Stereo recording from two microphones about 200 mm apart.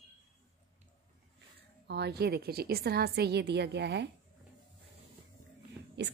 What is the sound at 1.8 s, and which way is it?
A woman's voice, 55° right (ahead or behind).